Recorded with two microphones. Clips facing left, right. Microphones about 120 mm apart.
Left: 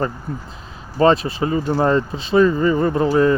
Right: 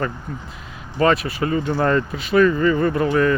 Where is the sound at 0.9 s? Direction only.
30° left (ahead or behind).